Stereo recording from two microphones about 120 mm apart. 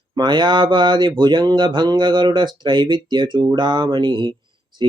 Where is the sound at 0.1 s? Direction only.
40° right (ahead or behind).